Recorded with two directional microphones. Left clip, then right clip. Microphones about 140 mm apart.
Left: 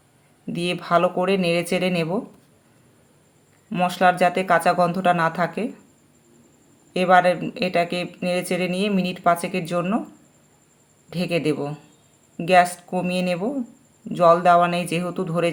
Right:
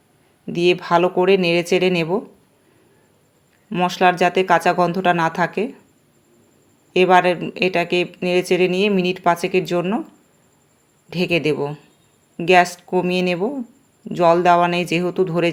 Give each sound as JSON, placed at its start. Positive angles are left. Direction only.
{"t": 0.4, "sound": "speech", "side_deg": -35}
{"t": 3.7, "sound": "speech", "side_deg": -30}
{"t": 6.9, "sound": "speech", "side_deg": -40}
{"t": 11.1, "sound": "speech", "side_deg": -40}